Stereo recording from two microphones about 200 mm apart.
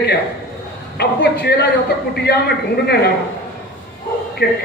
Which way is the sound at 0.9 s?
55° left (ahead or behind).